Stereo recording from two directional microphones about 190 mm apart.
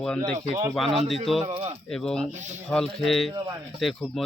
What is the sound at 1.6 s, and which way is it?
Speech, 30° right (ahead or behind).